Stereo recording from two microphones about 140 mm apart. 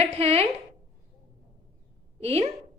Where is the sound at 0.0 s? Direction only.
45° right (ahead or behind).